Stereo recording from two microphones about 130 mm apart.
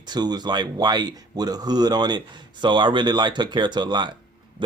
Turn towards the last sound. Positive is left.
turn(degrees=-35)  # may be behind; listen again after turning